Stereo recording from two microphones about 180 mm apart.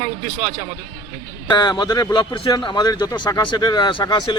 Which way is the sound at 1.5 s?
25° left (ahead or behind).